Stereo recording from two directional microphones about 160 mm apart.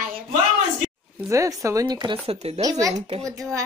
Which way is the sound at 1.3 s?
20° right (ahead or behind).